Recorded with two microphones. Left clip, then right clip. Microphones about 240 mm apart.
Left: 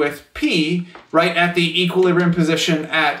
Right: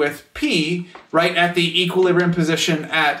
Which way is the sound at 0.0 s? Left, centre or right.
Centre.